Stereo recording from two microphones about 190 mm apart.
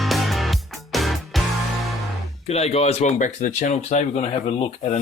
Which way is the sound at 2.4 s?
35° left (ahead or behind).